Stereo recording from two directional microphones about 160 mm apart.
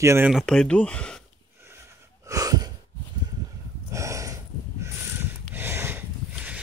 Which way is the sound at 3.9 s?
20° right (ahead or behind).